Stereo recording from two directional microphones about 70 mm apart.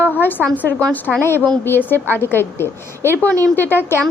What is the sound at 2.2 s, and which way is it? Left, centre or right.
A woman's voice, left.